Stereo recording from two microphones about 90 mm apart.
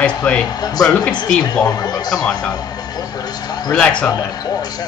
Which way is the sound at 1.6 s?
45° left (ahead or behind).